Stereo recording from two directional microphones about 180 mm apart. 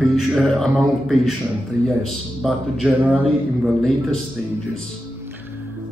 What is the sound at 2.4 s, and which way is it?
Speech, centre (ahead or behind).